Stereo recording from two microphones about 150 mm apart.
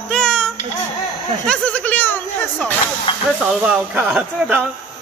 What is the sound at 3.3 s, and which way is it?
A man's voice, centre (ahead or behind).